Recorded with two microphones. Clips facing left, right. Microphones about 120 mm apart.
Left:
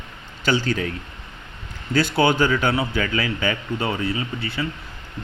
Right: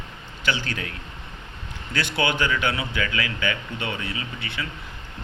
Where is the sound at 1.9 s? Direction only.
40° left (ahead or behind).